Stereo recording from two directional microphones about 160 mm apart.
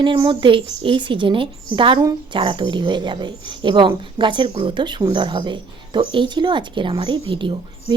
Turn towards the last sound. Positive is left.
turn(degrees=-30)  # may be behind; listen again after turning